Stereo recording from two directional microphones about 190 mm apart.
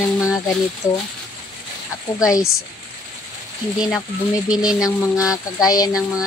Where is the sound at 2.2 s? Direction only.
15° left (ahead or behind).